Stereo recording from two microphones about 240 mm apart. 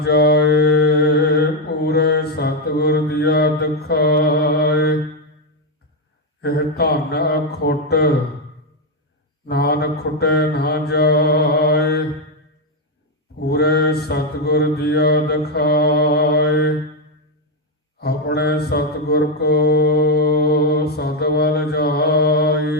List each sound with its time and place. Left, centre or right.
0.0 s mantra: left
6.4 s a sound: left
9.5 s mantra: left
13.4 s mantra: left
17.9 s mantra: left